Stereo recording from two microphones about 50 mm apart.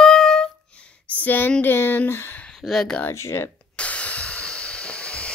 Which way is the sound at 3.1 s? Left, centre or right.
Left.